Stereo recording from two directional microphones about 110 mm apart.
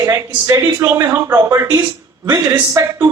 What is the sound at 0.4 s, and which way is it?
A woman's voice, 30° right (ahead or behind).